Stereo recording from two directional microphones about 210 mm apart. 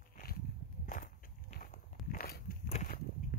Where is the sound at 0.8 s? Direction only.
40° left (ahead or behind).